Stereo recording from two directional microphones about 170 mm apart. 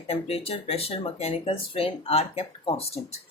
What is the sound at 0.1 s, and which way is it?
A woman's voice, 35° left (ahead or behind).